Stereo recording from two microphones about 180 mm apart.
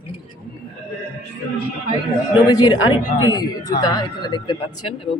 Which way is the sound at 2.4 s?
20° left (ahead or behind).